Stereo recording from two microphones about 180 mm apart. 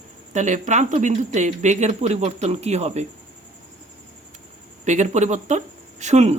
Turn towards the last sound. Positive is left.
turn(degrees=-40)  # may be behind; listen again after turning